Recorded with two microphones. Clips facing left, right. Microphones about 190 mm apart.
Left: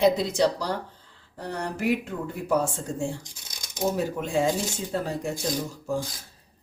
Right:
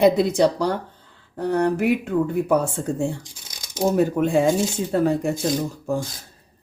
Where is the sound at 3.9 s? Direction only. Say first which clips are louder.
Right 10 dB; 60° right (ahead or behind).